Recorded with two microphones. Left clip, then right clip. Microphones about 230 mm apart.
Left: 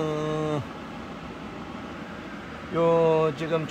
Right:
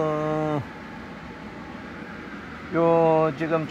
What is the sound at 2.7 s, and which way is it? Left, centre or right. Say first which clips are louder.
Speech: right 2 dB; centre.